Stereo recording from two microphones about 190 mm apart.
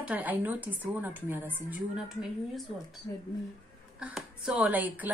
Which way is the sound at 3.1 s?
15° left (ahead or behind).